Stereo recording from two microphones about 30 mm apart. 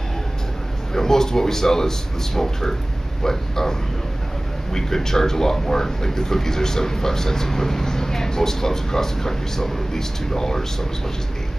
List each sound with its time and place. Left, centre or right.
0.9 s a man's voice: centre
4.7 s a man's voice: centre